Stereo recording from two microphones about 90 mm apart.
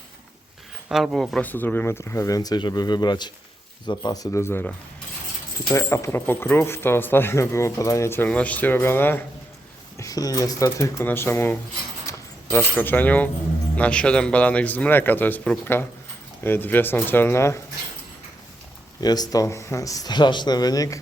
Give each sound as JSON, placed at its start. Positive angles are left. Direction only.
{"t": 0.9, "sound": "speech", "side_deg": -5}
{"t": 1.4, "sound": "speech", "side_deg": 20}
{"t": 4.4, "sound": "speech", "side_deg": 30}
{"t": 5.6, "sound": "speech", "side_deg": 35}
{"t": 8.3, "sound": "speech", "side_deg": 15}
{"t": 10.0, "sound": "speech", "side_deg": 40}
{"t": 11.0, "sound": "speech", "side_deg": 25}
{"t": 12.0, "sound": "keys jangling", "side_deg": 25}
{"t": 12.7, "sound": "speech", "side_deg": 20}
{"t": 18.9, "sound": "speech", "side_deg": 50}